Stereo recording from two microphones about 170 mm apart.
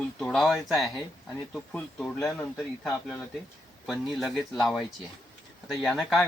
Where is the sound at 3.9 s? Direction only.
Centre (ahead or behind).